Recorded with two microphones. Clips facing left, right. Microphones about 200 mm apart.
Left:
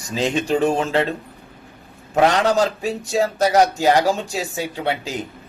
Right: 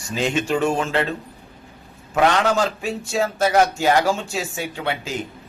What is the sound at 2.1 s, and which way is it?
Speech, 35° left (ahead or behind).